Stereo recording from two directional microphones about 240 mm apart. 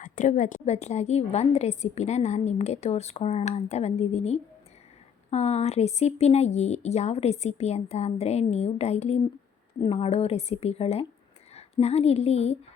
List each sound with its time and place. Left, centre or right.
0.0 s a woman's voice: left